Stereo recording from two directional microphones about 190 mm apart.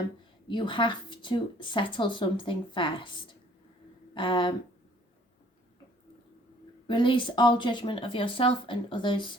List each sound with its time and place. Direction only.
0.4 s a woman's voice: 25° left (ahead or behind)
4.1 s a woman's voice: 25° left (ahead or behind)
6.8 s a woman's voice: 25° left (ahead or behind)